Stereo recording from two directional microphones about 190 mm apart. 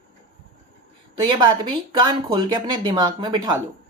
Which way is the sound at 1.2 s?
25° right (ahead or behind).